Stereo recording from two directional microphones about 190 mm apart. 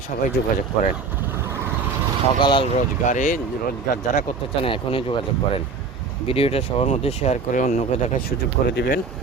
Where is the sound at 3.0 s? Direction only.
40° left (ahead or behind).